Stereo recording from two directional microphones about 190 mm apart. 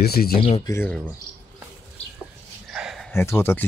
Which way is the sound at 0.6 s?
10° left (ahead or behind).